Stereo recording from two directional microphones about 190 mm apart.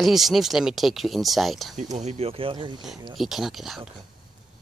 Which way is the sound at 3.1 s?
Centre (ahead or behind).